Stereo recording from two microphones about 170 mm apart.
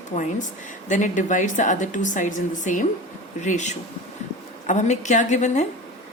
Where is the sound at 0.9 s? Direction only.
45° left (ahead or behind).